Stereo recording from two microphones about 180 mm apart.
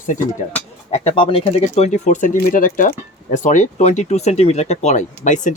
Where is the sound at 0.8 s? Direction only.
35° left (ahead or behind).